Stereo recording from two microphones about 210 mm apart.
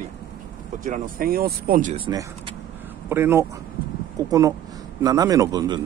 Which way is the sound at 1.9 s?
25° right (ahead or behind).